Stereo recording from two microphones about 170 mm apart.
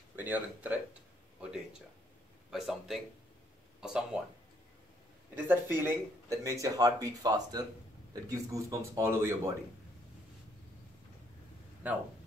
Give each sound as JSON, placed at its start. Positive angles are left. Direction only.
{"t": 0.1, "sound": "speech", "side_deg": -10}
{"t": 5.3, "sound": "speech", "side_deg": -15}